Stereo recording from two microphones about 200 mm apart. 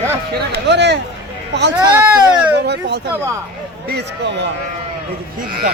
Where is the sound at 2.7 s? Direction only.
55° right (ahead or behind).